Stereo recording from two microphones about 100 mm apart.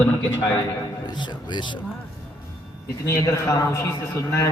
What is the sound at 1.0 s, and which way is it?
Speech, 45° left (ahead or behind).